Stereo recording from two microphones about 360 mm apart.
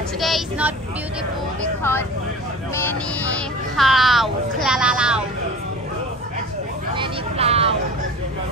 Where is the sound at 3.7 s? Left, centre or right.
Centre.